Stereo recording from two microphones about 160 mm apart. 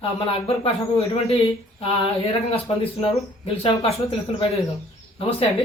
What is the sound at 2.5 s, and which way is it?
Speech, 35° left (ahead or behind).